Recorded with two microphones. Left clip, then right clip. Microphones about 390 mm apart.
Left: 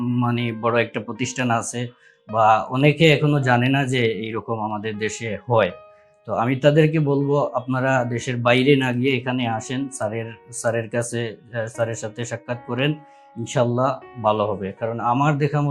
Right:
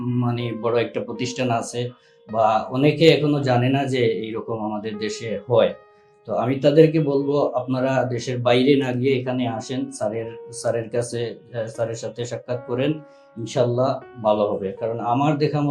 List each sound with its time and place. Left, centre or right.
0.2 s speech: left